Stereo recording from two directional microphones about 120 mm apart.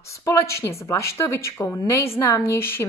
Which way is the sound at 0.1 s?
25° left (ahead or behind).